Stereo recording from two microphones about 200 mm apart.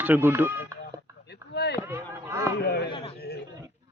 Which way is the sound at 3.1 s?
55° left (ahead or behind).